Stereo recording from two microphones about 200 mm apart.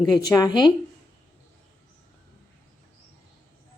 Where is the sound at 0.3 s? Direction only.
20° left (ahead or behind).